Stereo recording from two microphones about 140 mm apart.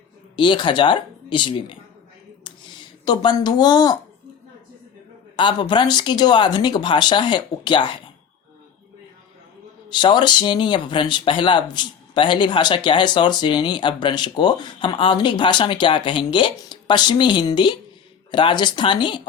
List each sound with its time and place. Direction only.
0.3 s speech: 35° left (ahead or behind)
3.0 s speech: 30° left (ahead or behind)
5.4 s speech: 35° left (ahead or behind)
9.9 s speech: 35° left (ahead or behind)